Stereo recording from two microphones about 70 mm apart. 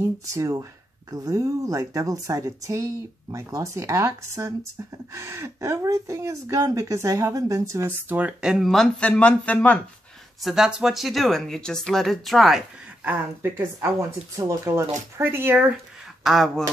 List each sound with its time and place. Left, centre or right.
0.0 s speech: right
8.1 s speech: right
8.4 s speech: centre
8.7 s speech: centre
9.1 s speech: centre
10.4 s speech: centre
13.0 s speech: right
14.3 s speech: right
14.7 s speech: right
16.3 s speech: centre